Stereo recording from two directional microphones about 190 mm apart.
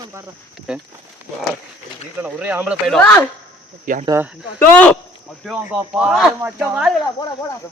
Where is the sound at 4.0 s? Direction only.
15° right (ahead or behind).